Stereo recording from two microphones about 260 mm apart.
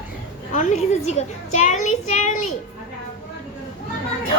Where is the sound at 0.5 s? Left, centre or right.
Left.